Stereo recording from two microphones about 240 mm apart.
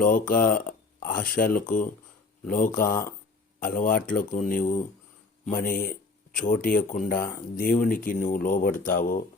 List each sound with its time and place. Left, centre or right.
0.0 s speech: left